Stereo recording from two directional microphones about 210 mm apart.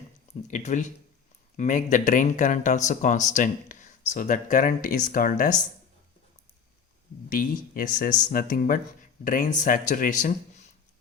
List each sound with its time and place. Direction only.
0.4 s speech: 35° left (ahead or behind)
7.3 s speech: 45° left (ahead or behind)